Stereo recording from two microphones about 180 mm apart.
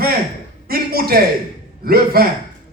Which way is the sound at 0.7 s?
55° right (ahead or behind).